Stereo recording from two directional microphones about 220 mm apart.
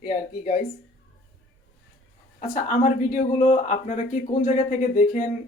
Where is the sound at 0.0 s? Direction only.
40° left (ahead or behind).